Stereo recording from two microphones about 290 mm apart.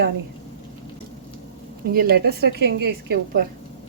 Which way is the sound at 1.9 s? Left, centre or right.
Right.